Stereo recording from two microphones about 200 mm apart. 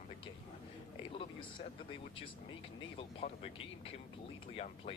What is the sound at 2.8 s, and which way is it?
Speech, 25° left (ahead or behind).